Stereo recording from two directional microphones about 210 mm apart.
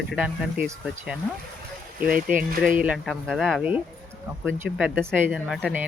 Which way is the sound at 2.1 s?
40° right (ahead or behind).